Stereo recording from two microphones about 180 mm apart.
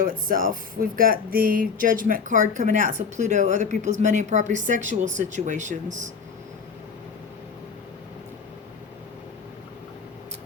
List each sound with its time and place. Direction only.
0.0 s speech: 50° right (ahead or behind)